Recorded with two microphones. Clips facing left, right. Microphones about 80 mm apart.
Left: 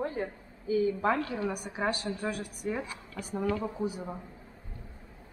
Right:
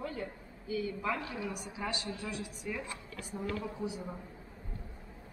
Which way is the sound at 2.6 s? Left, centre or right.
Left.